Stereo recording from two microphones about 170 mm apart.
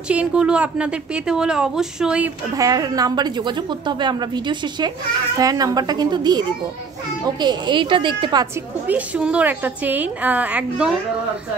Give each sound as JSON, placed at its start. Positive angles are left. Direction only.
{"t": 0.1, "sound": "a woman's voice", "side_deg": -5}
{"t": 2.5, "sound": "a woman's voice", "side_deg": -20}
{"t": 8.8, "sound": "a woman's voice", "side_deg": -10}